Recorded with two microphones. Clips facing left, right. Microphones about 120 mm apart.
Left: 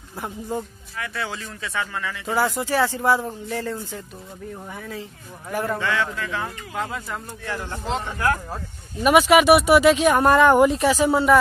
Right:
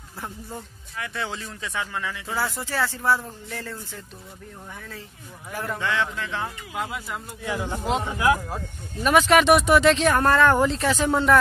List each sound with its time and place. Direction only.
0.9 s speech: 20° right (ahead or behind)
2.2 s speech: 15° left (ahead or behind)
3.4 s a sound: 20° left (ahead or behind)
4.7 s speech: 10° left (ahead or behind)
5.8 s speech: 15° right (ahead or behind)
8.5 s speech: 10° left (ahead or behind)